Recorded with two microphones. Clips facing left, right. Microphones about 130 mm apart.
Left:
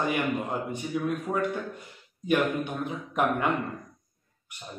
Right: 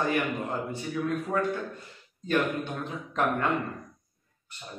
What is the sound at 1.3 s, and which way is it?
A man's voice, 15° left (ahead or behind).